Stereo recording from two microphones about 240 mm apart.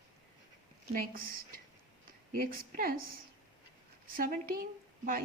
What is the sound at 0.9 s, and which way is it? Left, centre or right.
A woman's voice, right.